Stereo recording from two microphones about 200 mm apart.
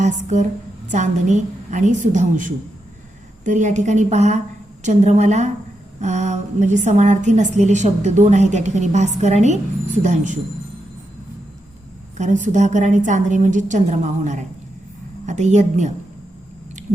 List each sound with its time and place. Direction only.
0.0 s a woman's voice: 40° right (ahead or behind)
12.1 s a woman's voice: 35° right (ahead or behind)